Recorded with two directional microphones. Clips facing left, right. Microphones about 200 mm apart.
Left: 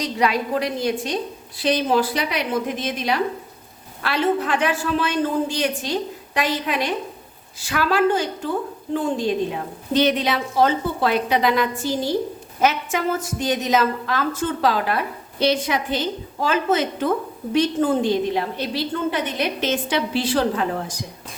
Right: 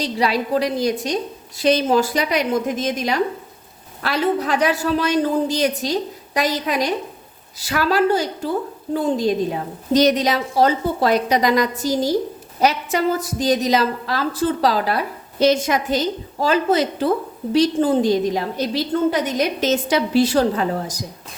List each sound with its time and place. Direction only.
0.0 s a woman's voice: 35° right (ahead or behind)